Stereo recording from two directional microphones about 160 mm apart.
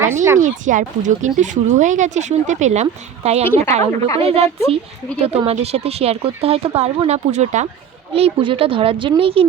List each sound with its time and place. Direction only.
0.0 s speech: 15° right (ahead or behind)
0.3 s speech: 50° right (ahead or behind)
5.5 s speech: 40° right (ahead or behind)